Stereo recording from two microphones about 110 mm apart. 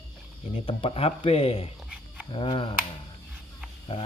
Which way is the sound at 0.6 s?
55° left (ahead or behind).